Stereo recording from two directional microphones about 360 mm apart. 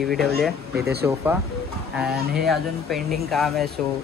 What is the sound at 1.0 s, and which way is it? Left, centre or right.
Speech, centre.